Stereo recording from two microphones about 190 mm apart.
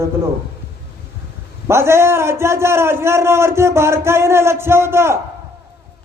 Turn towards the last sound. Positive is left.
turn(degrees=-15)  # may be behind; listen again after turning